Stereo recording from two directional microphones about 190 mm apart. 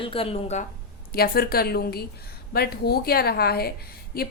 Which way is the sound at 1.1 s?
55° left (ahead or behind).